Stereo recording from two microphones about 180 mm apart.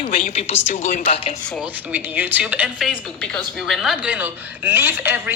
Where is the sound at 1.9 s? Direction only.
10° right (ahead or behind).